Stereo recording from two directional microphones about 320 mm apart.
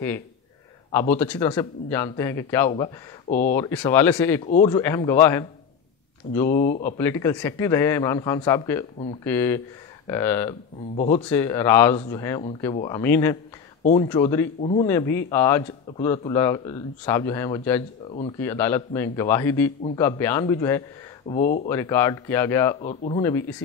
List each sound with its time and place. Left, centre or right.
0.9 s speech: centre
2.7 s speech: left
3.5 s speech: centre
4.5 s speech: centre
6.4 s speech: left
7.0 s speech: centre
11.0 s speech: left
11.2 s speech: centre
14.6 s speech: left
14.9 s speech: centre
21.3 s speech: left
21.6 s speech: centre